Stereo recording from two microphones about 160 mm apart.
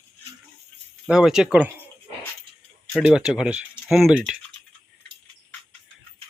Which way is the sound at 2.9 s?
5° right (ahead or behind).